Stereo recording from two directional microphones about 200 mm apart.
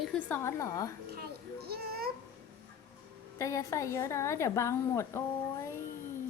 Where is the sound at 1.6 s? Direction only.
50° right (ahead or behind).